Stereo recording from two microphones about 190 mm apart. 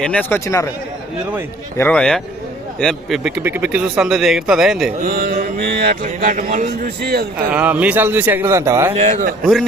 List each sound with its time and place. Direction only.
0.0 s speech: 5° left (ahead or behind)
1.8 s speech: 5° left (ahead or behind)
3.4 s speech: 10° right (ahead or behind)
5.0 s speech: 50° right (ahead or behind)
5.5 s speech: 55° right (ahead or behind)
6.7 s a man's voice: 55° right (ahead or behind)
7.5 s a man's voice: 5° right (ahead or behind)
8.9 s a man's voice: 35° right (ahead or behind)
9.4 s speech: centre (ahead or behind)